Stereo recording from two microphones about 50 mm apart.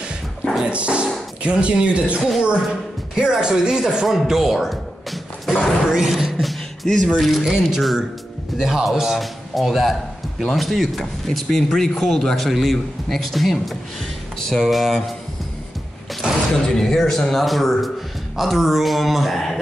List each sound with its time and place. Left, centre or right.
0.7 s speech: right
2.1 s a man's voice: centre
3.2 s speech: centre
5.9 s a man's voice: centre
16.2 s a sound: centre
16.6 s a man's voice: centre